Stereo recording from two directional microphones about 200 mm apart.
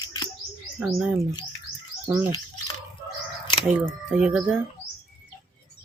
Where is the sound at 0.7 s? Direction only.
5° right (ahead or behind).